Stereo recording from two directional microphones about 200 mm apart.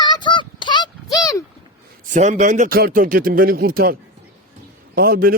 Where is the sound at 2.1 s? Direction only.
35° right (ahead or behind).